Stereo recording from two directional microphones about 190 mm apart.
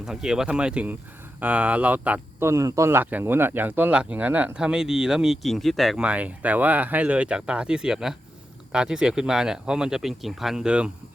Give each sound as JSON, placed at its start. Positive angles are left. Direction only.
{"t": 0.0, "sound": "speech", "side_deg": -5}